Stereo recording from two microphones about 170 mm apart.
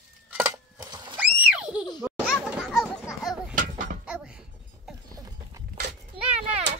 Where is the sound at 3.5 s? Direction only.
55° right (ahead or behind).